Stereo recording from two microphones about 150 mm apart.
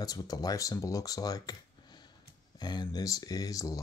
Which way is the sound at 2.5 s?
30° left (ahead or behind).